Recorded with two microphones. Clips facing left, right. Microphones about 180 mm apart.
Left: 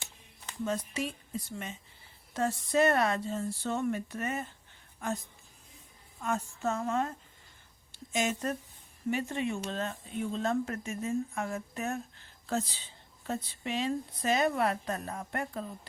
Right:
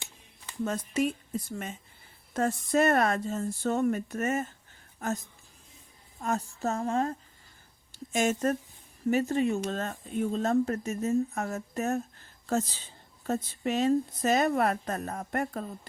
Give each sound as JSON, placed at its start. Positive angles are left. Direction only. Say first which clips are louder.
{"t": 0.6, "sound": "speech", "louder": "right 5 dB", "side_deg": -50}
{"t": 7.9, "sound": "speech", "louder": "right 4 dB", "side_deg": -45}